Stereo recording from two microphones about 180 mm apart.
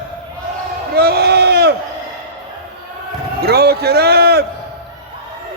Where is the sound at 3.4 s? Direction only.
60° right (ahead or behind).